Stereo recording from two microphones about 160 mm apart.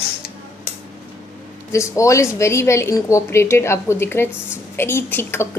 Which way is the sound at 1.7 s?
20° left (ahead or behind).